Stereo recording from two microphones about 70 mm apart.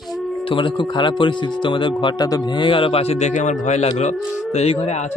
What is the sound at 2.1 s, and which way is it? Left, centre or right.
Mantra, left.